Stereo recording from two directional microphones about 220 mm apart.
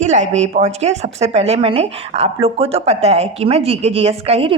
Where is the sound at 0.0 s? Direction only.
30° right (ahead or behind).